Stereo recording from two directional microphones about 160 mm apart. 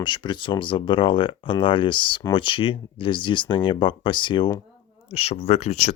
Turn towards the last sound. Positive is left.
turn(degrees=45)  # may be behind; listen again after turning